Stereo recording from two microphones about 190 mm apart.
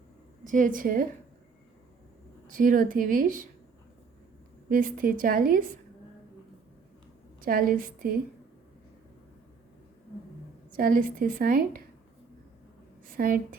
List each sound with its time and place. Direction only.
0.4 s a woman's voice: 45° right (ahead or behind)
2.5 s a woman's voice: 45° right (ahead or behind)
4.7 s a woman's voice: 45° right (ahead or behind)
7.4 s a woman's voice: 50° right (ahead or behind)
10.8 s a woman's voice: 45° right (ahead or behind)
13.1 s a woman's voice: 50° right (ahead or behind)